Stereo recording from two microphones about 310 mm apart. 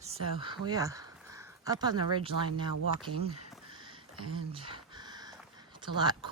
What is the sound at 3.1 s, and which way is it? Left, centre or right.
Speech, right.